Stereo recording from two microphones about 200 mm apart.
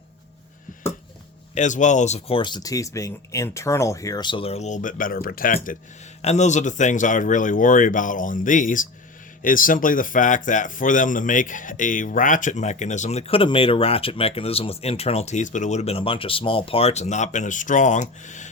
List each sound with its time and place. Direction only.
1.5 s speech: 35° left (ahead or behind)
6.2 s speech: 35° left (ahead or behind)